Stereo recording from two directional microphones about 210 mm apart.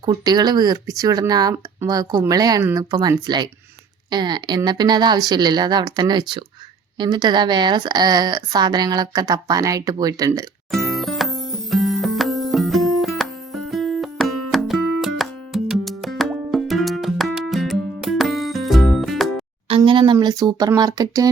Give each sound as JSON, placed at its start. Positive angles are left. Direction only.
{"t": 0.0, "sound": "speech", "side_deg": -20}
{"t": 10.7, "sound": "music", "side_deg": 0}
{"t": 19.6, "sound": "speech", "side_deg": -25}